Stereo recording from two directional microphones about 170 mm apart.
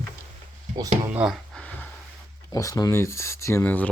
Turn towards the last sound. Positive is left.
turn(degrees=10)  # may be behind; listen again after turning